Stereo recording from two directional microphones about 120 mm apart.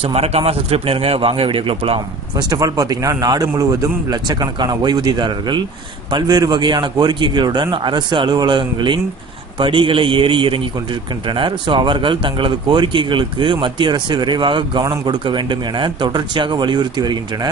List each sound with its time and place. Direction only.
0.0 s speech: 60° right (ahead or behind)
2.3 s speech: 30° right (ahead or behind)